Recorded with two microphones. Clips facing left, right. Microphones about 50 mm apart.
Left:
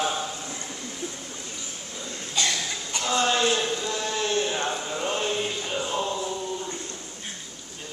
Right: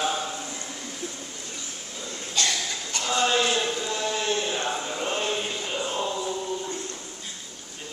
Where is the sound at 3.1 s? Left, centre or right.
Centre.